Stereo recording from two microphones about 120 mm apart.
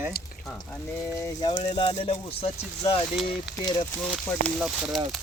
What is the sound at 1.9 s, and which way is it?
Speech, 55° left (ahead or behind).